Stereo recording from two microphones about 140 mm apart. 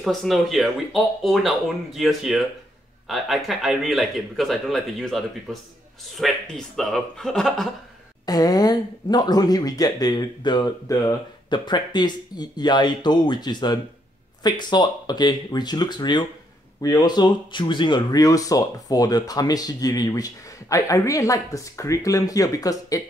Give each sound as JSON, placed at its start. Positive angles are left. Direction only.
{"t": 0.0, "sound": "speech", "side_deg": 0}
{"t": 8.3, "sound": "speech", "side_deg": 30}